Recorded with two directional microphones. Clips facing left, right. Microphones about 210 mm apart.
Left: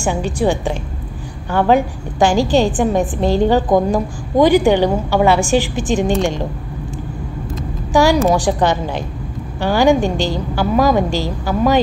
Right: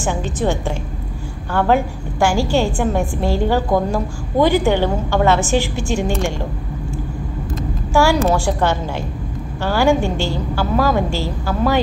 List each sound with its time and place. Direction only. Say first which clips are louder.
0.0 s a woman's voice: left 3 dB; 15° left (ahead or behind)
7.9 s a woman's voice: left 2 dB; 15° left (ahead or behind)